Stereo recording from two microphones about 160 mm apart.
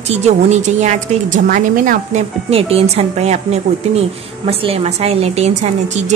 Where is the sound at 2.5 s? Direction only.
40° right (ahead or behind).